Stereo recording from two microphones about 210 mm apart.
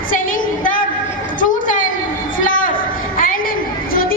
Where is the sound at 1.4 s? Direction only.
40° left (ahead or behind).